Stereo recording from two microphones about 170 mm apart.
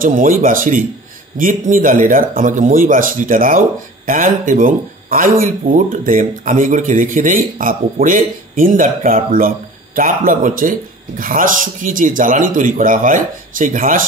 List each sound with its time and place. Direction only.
0.0 s speech: 55° right (ahead or behind)